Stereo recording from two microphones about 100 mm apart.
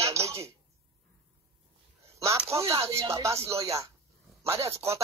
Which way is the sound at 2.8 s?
30° right (ahead or behind).